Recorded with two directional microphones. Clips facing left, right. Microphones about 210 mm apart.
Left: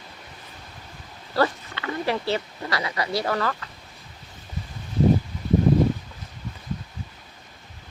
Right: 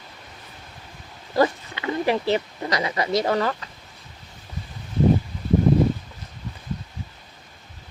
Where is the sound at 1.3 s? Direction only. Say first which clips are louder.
Right 3 dB; 15° right (ahead or behind).